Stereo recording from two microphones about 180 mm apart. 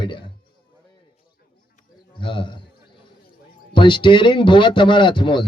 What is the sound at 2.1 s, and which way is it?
Speech, 25° left (ahead or behind).